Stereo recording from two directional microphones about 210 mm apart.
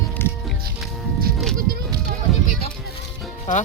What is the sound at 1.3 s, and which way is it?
Sheep, 45° right (ahead or behind).